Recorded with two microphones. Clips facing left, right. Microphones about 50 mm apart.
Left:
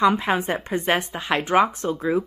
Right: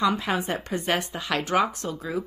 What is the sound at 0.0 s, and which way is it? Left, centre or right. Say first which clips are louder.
Speech: left 5 dB; left.